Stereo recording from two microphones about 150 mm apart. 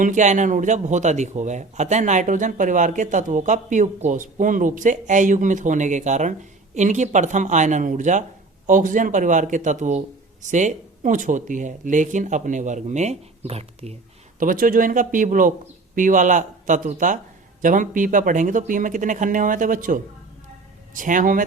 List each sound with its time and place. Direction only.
0.0 s speech: 55° right (ahead or behind)
14.3 s speech: 65° right (ahead or behind)